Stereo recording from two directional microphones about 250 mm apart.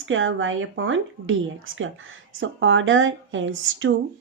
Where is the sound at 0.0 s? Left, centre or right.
Right.